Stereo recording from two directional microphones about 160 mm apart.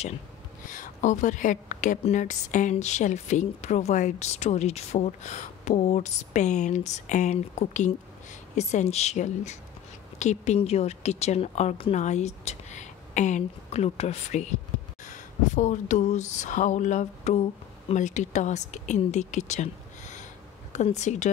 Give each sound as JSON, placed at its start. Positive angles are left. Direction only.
{"t": 0.7, "sound": "a woman's voice", "side_deg": 50}